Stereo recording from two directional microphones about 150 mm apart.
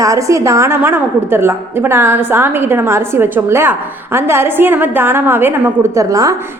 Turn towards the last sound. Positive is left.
turn(degrees=-20)  # may be behind; listen again after turning